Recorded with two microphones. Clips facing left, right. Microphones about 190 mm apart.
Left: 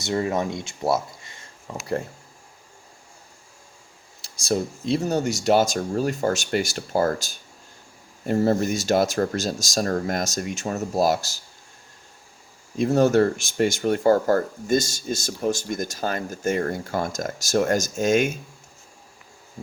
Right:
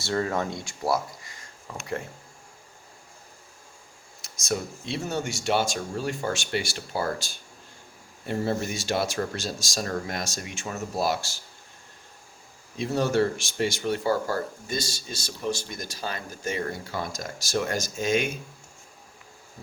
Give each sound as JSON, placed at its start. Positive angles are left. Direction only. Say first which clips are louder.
{"t": 0.0, "sound": "speech", "louder": "left 3 dB", "side_deg": 20}
{"t": 4.2, "sound": "speech", "louder": "left 5 dB", "side_deg": 35}
{"t": 12.7, "sound": "speech", "louder": "left 6 dB", "side_deg": 50}